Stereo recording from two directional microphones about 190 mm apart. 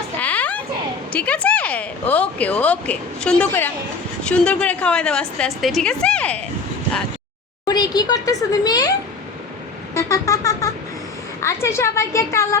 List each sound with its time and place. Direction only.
0.2 s a sound: 10° left (ahead or behind)
1.1 s a woman's voice: 5° left (ahead or behind)
7.7 s speech: 20° left (ahead or behind)
9.9 s a woman's voice: 15° left (ahead or behind)